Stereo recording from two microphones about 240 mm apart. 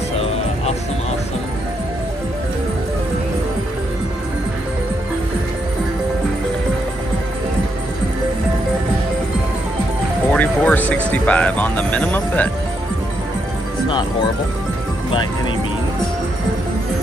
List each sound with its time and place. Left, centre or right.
10.3 s music: centre
11.1 s speech: centre
13.8 s speech: centre